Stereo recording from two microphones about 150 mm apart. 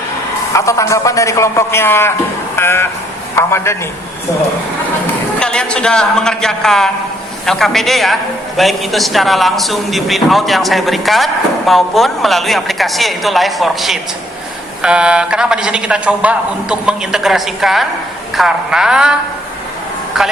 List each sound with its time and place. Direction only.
0.5 s a man's voice: 20° left (ahead or behind)
5.4 s a man's voice: 5° left (ahead or behind)
20.1 s a woman's voice: centre (ahead or behind)